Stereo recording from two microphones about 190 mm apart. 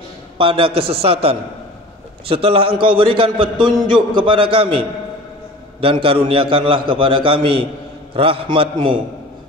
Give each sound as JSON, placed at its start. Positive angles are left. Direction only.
{"t": 0.4, "sound": "a man's voice", "side_deg": -30}
{"t": 5.8, "sound": "a man's voice", "side_deg": -30}